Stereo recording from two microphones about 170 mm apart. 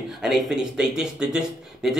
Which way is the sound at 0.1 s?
Centre (ahead or behind).